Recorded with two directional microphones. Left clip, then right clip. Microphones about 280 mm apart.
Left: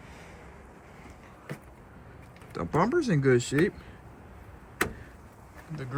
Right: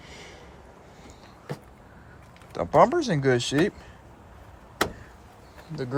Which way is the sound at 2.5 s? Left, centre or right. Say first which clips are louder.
Right 7 dB; centre.